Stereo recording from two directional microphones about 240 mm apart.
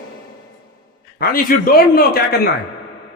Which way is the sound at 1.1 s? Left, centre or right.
Left.